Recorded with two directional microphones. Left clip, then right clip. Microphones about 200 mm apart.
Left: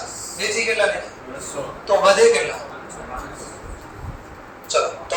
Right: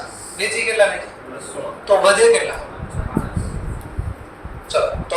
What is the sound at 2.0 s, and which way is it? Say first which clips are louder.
Speech: even; 15° right (ahead or behind).